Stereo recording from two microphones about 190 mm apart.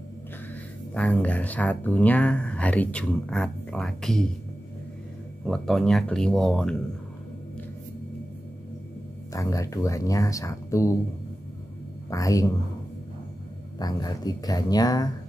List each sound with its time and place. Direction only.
0.9 s speech: 5° left (ahead or behind)
5.4 s speech: centre (ahead or behind)
9.3 s speech: 15° left (ahead or behind)
12.1 s speech: 15° left (ahead or behind)
13.7 s speech: 20° left (ahead or behind)